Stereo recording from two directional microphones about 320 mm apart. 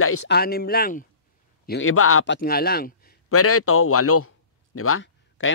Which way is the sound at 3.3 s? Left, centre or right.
Left.